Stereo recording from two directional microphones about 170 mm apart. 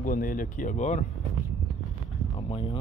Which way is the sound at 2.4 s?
30° left (ahead or behind).